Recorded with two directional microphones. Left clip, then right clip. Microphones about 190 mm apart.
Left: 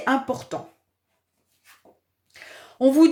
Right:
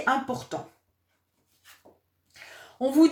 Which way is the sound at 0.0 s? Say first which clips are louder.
Left 2 dB; 40° left (ahead or behind).